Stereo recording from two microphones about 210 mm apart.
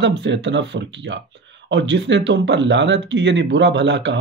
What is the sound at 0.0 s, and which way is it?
Speech, 60° right (ahead or behind).